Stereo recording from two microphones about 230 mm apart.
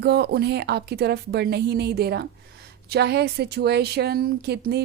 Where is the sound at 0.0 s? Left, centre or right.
Right.